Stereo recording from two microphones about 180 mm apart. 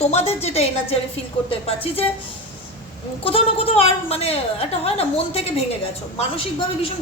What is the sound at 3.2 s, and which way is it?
A woman's voice, 30° left (ahead or behind).